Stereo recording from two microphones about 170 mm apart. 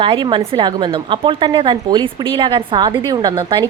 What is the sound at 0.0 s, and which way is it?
A woman's voice, 30° right (ahead or behind).